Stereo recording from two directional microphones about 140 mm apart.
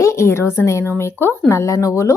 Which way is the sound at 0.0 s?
20° left (ahead or behind).